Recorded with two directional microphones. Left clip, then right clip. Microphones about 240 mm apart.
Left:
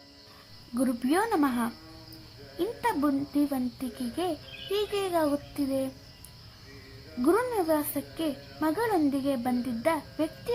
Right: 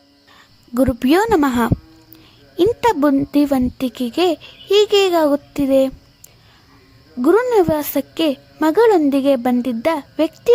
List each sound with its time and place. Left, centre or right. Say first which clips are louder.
0.7 s speech: right 12 dB; right
7.2 s speech: right 12 dB; right